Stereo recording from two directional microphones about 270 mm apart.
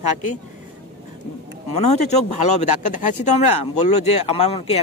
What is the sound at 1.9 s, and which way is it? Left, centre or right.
Speech, left.